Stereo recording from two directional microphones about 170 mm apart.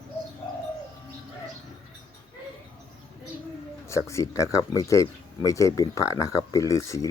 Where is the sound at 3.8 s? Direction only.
15° left (ahead or behind).